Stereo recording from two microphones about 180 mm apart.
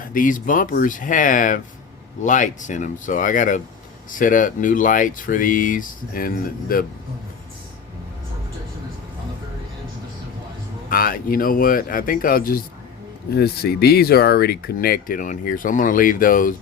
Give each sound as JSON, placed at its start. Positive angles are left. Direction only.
{"t": 0.0, "sound": "speech", "side_deg": 50}
{"t": 10.8, "sound": "speech", "side_deg": 50}